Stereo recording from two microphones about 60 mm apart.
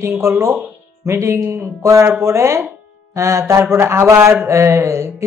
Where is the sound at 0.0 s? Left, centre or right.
Right.